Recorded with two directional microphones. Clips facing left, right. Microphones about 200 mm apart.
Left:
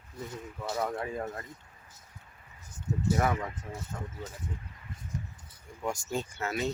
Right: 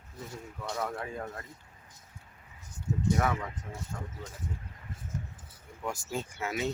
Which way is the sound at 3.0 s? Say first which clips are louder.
Left 1 dB; 5° left (ahead or behind).